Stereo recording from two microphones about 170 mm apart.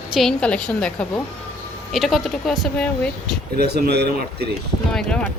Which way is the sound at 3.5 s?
70° right (ahead or behind).